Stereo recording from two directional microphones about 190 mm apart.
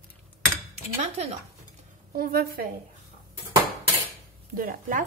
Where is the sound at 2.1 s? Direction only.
50° right (ahead or behind).